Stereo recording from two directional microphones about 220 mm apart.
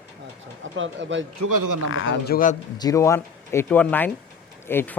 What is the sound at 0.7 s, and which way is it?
Speech, 60° right (ahead or behind).